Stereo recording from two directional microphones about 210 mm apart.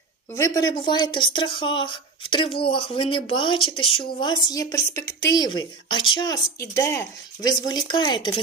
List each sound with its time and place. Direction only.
0.3 s speech: 15° left (ahead or behind)